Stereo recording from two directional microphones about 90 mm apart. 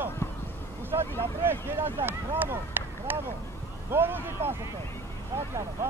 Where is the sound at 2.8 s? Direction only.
25° right (ahead or behind).